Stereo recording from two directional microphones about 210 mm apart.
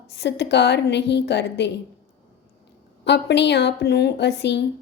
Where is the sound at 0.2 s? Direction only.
55° left (ahead or behind).